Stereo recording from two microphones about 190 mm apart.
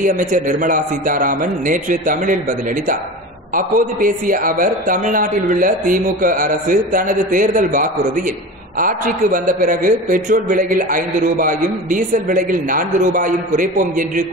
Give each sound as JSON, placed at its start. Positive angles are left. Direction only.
{"t": 0.0, "sound": "a man's voice", "side_deg": -45}
{"t": 3.5, "sound": "a man's voice", "side_deg": -45}